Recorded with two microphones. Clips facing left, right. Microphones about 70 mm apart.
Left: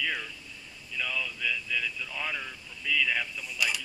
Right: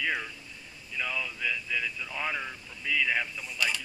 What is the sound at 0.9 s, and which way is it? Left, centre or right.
Speech, right.